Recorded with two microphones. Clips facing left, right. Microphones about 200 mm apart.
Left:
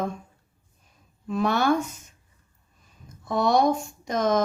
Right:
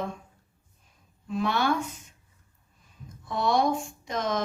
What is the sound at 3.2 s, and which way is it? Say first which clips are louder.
Speech: left 4 dB; 45° left (ahead or behind).